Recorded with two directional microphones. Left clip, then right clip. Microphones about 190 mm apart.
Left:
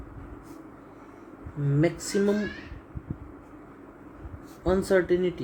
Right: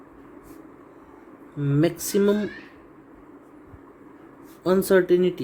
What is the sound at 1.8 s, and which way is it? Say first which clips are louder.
Speech: right 4 dB; 60° right (ahead or behind).